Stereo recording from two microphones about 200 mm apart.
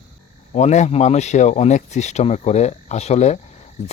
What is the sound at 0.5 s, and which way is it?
Speech, 35° left (ahead or behind).